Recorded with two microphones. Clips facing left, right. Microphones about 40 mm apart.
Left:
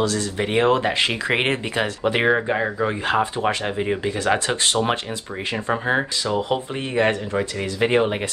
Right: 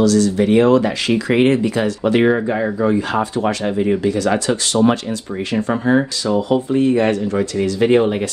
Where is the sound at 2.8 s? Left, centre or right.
Left.